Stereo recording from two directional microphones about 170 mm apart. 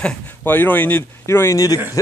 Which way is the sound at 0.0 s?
10° left (ahead or behind).